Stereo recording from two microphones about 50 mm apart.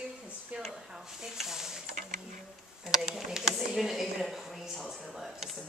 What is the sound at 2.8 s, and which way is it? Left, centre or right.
Speech, centre.